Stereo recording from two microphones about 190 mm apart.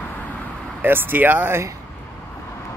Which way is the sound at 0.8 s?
10° right (ahead or behind).